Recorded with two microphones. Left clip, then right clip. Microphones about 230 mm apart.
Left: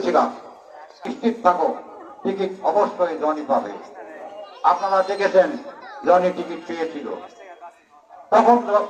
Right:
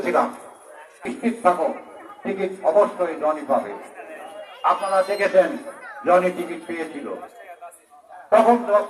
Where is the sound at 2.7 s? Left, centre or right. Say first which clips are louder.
Right 1 dB; right.